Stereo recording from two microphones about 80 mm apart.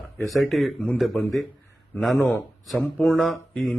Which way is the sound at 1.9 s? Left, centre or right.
Centre.